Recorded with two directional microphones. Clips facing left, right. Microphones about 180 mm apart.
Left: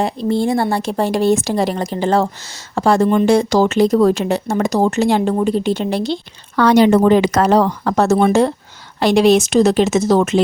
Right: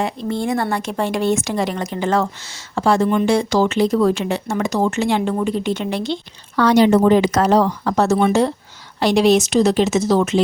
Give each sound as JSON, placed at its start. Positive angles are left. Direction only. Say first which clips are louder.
{"t": 0.0, "sound": "speech", "louder": "left 5 dB", "side_deg": 35}
{"t": 6.6, "sound": "speech", "louder": "left 2 dB", "side_deg": 60}